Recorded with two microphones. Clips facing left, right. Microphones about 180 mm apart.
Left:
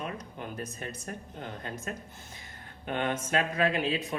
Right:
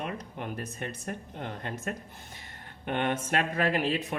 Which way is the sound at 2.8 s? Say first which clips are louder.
Right 2 dB; 60° right (ahead or behind).